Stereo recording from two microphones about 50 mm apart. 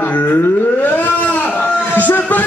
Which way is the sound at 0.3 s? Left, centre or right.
Left.